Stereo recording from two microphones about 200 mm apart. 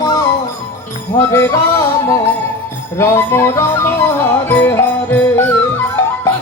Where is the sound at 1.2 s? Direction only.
15° left (ahead or behind).